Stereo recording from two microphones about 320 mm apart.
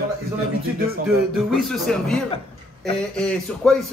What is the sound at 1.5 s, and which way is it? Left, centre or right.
Speech, centre.